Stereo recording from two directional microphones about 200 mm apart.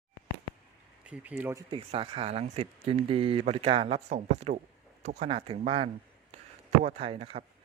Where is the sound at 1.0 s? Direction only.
5° right (ahead or behind).